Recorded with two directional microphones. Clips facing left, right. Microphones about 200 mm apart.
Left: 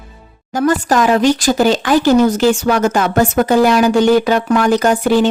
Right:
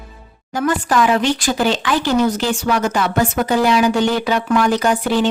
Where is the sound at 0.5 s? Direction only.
40° left (ahead or behind).